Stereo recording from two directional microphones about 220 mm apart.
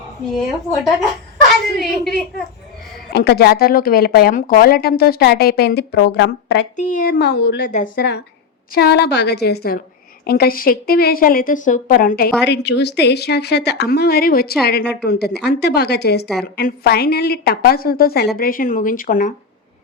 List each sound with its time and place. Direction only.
1.7 s a woman's voice: centre (ahead or behind)
3.1 s speech: 50° left (ahead or behind)
6.7 s speech: 40° left (ahead or behind)
7.7 s a woman's voice: 35° left (ahead or behind)
8.7 s a woman's voice: 45° left (ahead or behind)
12.5 s a woman's voice: 50° left (ahead or behind)